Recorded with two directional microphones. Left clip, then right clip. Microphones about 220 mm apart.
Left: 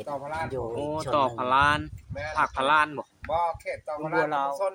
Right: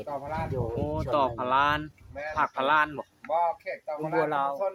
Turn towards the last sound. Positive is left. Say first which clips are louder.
# even
turn(degrees=5)  # may be behind; listen again after turning